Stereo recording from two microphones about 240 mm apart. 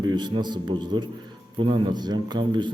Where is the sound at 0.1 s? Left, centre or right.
Centre.